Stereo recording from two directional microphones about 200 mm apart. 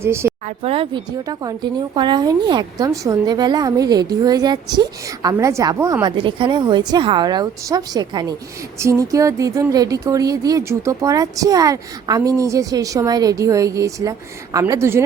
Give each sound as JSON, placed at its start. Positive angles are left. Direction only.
{"t": 0.0, "sound": "speech", "side_deg": -15}
{"t": 0.4, "sound": "a woman's voice", "side_deg": -30}